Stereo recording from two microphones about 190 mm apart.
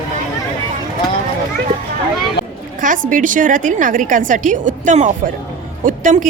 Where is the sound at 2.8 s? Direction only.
45° right (ahead or behind).